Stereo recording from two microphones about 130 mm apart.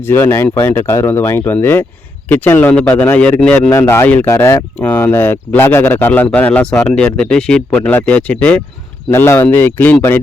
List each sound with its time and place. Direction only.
0.0 s speech: 15° left (ahead or behind)
3.7 s speech: 20° left (ahead or behind)